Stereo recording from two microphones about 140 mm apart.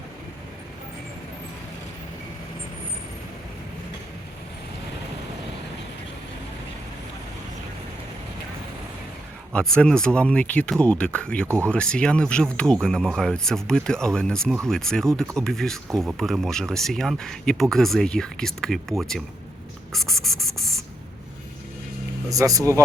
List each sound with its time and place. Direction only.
9.5 s speech: 5° left (ahead or behind)
11.4 s speech: 20° right (ahead or behind)
11.7 s speech: 5° left (ahead or behind)
19.9 s a sound: centre (ahead or behind)
22.3 s speech: 25° right (ahead or behind)